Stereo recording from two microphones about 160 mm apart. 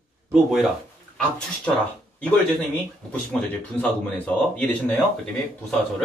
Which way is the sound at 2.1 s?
5° left (ahead or behind).